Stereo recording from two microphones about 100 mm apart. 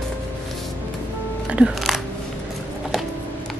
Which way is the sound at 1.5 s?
10° right (ahead or behind).